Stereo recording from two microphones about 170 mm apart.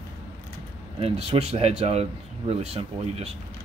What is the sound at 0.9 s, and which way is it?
Speech, 35° right (ahead or behind).